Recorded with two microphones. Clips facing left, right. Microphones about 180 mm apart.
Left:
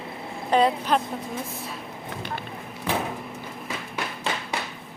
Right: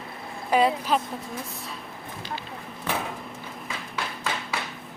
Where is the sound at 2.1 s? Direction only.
70° left (ahead or behind).